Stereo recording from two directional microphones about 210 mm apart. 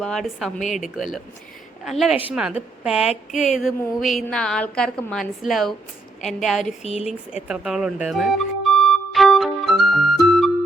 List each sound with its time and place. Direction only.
0.0 s a woman's voice: centre (ahead or behind)
6.8 s speech: 30° left (ahead or behind)
7.4 s music: 5° right (ahead or behind)